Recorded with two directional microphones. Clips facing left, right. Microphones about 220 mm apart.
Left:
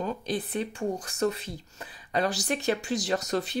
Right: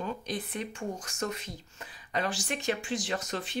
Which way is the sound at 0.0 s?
35° left (ahead or behind).